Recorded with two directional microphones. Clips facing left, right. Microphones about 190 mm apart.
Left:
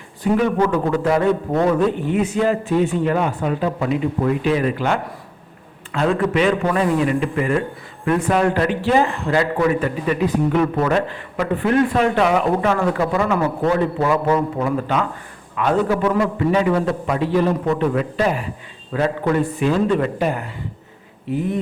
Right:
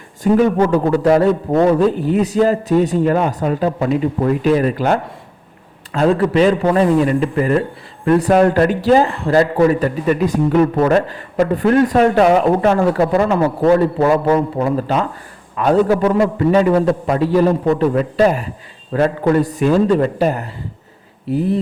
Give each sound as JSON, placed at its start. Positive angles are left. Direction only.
{"t": 0.2, "sound": "a man's voice", "side_deg": -40}